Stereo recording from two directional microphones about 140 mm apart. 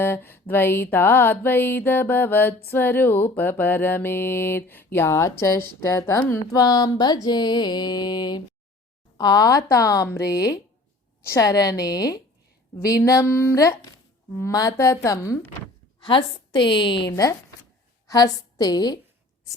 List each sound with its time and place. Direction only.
0.0 s mantra: 15° left (ahead or behind)
5.4 s speech: 20° left (ahead or behind)
16.0 s a woman's voice: 35° left (ahead or behind)
17.1 s speech: 25° left (ahead or behind)